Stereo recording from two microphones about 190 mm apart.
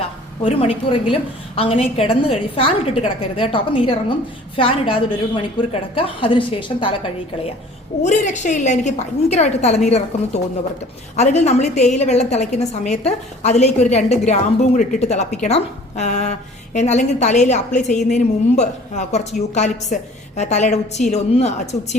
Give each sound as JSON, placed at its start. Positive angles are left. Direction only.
{"t": 0.4, "sound": "a woman's voice", "side_deg": 30}
{"t": 8.0, "sound": "a woman's voice", "side_deg": 40}